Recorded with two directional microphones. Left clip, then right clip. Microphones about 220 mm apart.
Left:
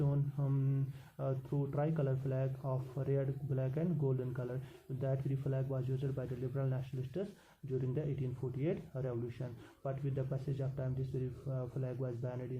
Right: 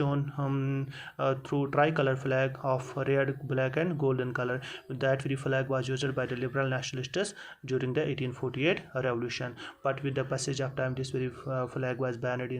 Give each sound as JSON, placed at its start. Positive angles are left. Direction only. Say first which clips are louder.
{"t": 0.0, "sound": "mantra", "louder": "right 9 dB", "side_deg": -20}
{"t": 1.7, "sound": "speech", "louder": "right 13 dB", "side_deg": -20}